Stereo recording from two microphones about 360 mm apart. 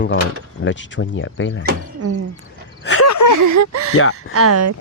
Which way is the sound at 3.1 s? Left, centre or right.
Left.